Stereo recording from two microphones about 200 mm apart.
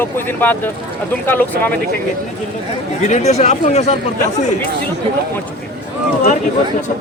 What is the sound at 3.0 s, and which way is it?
Speech, 35° left (ahead or behind).